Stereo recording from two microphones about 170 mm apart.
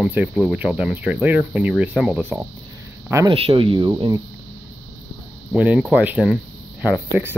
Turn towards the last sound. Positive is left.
turn(degrees=-10)  # may be behind; listen again after turning